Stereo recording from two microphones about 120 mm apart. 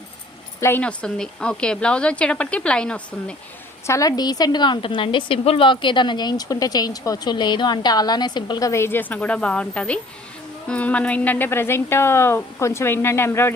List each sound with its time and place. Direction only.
0.6 s a woman's voice: 15° left (ahead or behind)
3.8 s a woman's voice: 25° left (ahead or behind)